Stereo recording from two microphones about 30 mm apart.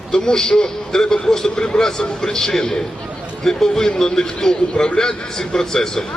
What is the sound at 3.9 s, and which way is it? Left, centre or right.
A man's voice, left.